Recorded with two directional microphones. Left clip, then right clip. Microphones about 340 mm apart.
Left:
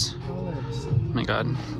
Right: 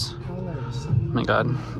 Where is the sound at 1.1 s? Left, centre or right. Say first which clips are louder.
Right 5 dB; centre.